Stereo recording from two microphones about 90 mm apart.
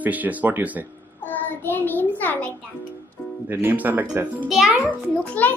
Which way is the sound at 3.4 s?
20° right (ahead or behind).